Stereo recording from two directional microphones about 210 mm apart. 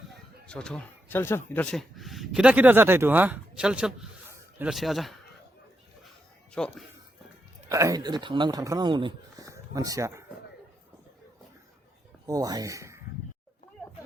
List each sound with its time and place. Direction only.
0.4 s speech: 5° left (ahead or behind)
6.5 s speech: 5° left (ahead or behind)
7.7 s speech: 15° right (ahead or behind)
12.2 s speech: 15° right (ahead or behind)